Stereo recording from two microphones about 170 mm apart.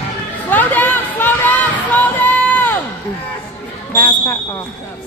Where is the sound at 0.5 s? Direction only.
10° left (ahead or behind).